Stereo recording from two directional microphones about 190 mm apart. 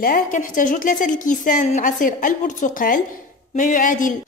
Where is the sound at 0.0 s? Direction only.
45° left (ahead or behind).